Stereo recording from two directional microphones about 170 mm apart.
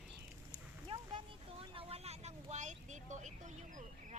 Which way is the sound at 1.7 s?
35° right (ahead or behind).